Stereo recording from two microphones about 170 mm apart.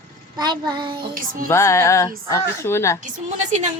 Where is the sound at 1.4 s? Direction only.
15° left (ahead or behind).